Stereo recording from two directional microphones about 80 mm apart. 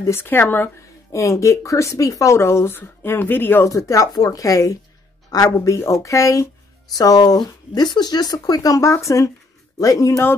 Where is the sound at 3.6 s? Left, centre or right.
Left.